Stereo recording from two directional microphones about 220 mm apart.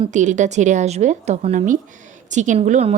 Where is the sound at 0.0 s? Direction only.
35° right (ahead or behind).